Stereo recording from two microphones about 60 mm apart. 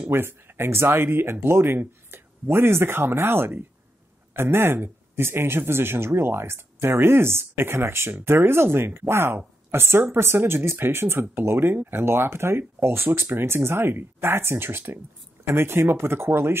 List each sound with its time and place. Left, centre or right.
0.1 s speech: right